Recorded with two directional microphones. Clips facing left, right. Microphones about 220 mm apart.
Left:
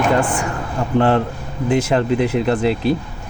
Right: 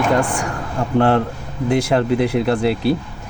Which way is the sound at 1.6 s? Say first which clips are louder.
Even; 15° right (ahead or behind).